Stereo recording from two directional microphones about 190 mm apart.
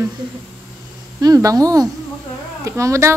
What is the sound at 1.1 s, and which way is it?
A woman's voice, 20° right (ahead or behind).